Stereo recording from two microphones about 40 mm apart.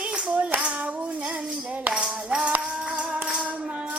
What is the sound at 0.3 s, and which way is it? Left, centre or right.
Clapping, right.